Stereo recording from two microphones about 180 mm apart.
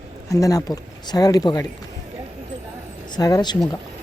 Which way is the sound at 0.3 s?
20° left (ahead or behind).